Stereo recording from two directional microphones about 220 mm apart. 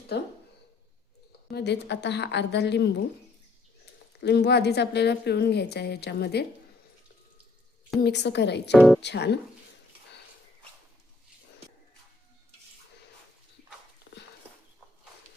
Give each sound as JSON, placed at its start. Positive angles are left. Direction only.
{"t": 0.1, "sound": "a woman's voice", "side_deg": 50}
{"t": 1.5, "sound": "a woman's voice", "side_deg": 50}
{"t": 4.2, "sound": "a woman's voice", "side_deg": 50}
{"t": 8.0, "sound": "a woman's voice", "side_deg": 50}
{"t": 8.7, "sound": "speech", "side_deg": 0}
{"t": 9.0, "sound": "a woman's voice", "side_deg": 50}
{"t": 14.1, "sound": "a sound", "side_deg": 55}